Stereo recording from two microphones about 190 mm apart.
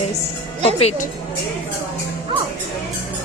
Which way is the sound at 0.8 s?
35° left (ahead or behind).